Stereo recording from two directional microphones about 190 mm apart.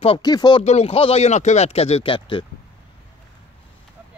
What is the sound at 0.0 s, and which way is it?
Speech, 25° left (ahead or behind).